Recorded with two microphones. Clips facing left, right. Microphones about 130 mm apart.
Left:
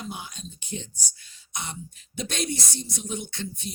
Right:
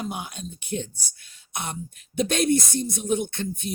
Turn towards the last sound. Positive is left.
turn(degrees=-55)  # may be behind; listen again after turning